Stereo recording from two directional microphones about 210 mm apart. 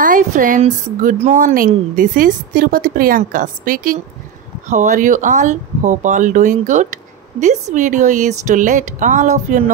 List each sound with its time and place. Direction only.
0.0 s speech: 40° right (ahead or behind)